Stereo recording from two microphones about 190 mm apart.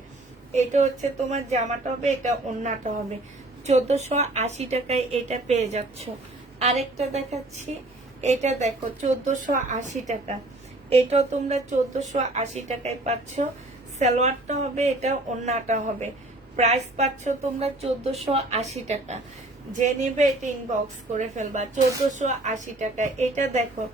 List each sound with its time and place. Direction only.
0.5 s a woman's voice: 40° right (ahead or behind)